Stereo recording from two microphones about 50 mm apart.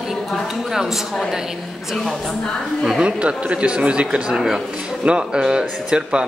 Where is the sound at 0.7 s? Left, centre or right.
Centre.